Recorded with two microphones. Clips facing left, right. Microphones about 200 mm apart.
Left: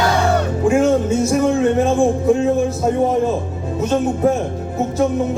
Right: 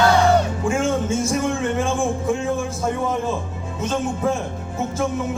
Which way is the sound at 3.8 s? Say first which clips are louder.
Left 6 dB; 40° left (ahead or behind).